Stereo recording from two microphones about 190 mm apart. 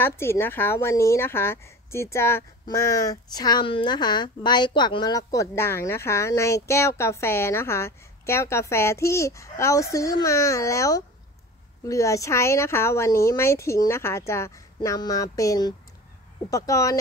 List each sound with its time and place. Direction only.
0.0 s speech: 10° left (ahead or behind)